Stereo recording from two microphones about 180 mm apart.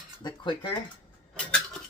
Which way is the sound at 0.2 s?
25° left (ahead or behind).